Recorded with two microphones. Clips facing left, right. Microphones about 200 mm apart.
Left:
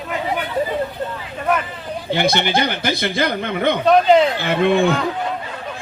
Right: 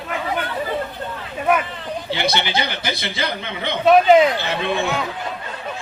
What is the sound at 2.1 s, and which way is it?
A man's voice, 50° left (ahead or behind).